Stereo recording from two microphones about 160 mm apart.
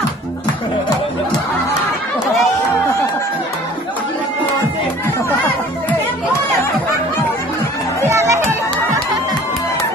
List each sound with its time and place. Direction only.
8.0 s music: 15° right (ahead or behind)